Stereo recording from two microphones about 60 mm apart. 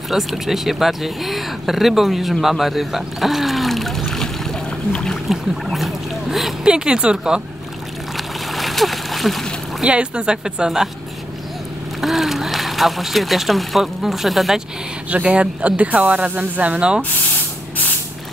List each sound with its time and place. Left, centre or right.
0.1 s speech: centre
2.4 s trickle: centre
5.3 s boat: centre
6.6 s speech: centre
8.2 s splash: centre
9.8 s speech: centre
12.0 s speech: centre
15.0 s speech: right